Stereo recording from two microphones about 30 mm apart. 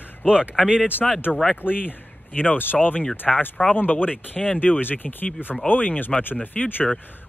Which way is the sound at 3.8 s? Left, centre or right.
Left.